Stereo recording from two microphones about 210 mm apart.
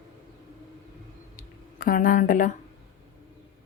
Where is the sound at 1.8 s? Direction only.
40° left (ahead or behind).